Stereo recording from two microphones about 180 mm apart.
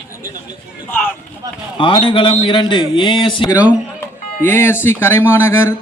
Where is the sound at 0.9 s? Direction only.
10° left (ahead or behind).